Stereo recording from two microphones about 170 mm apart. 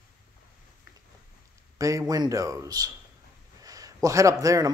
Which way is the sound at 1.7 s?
20° right (ahead or behind).